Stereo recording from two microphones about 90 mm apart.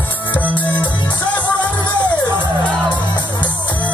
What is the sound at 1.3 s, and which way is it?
Music, 55° left (ahead or behind).